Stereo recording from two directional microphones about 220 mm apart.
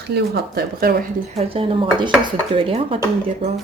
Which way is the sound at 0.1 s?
45° right (ahead or behind).